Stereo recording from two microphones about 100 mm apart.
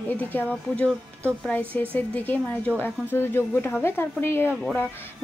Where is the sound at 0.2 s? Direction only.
15° left (ahead or behind).